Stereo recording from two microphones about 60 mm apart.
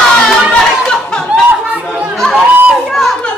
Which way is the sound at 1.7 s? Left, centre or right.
Right.